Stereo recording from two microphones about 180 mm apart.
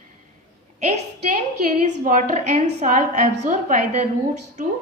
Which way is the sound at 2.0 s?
40° right (ahead or behind).